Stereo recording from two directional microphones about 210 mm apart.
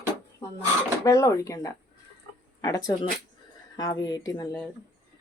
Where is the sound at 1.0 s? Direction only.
15° left (ahead or behind).